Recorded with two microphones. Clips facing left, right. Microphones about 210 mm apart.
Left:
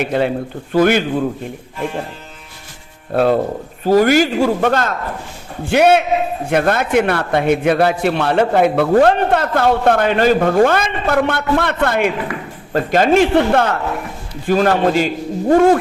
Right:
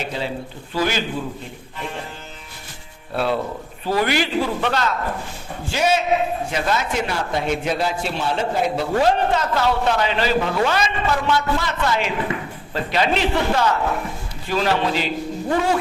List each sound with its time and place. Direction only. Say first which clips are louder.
0.0 s a man's voice: left 9 dB; 60° left (ahead or behind)
3.1 s a man's voice: left 8 dB; 45° left (ahead or behind)
5.6 s a man's voice: left 7 dB; 60° left (ahead or behind)